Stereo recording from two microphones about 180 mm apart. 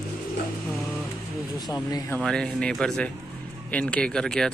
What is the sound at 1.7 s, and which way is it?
Speech, 20° left (ahead or behind).